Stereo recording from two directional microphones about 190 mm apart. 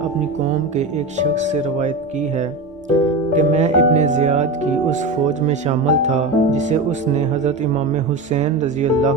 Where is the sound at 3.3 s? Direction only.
40° right (ahead or behind).